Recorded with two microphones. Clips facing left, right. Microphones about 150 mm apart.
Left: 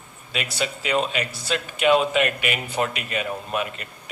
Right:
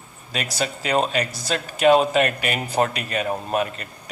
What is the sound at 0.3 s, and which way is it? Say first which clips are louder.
Speech: right 1 dB; 40° right (ahead or behind).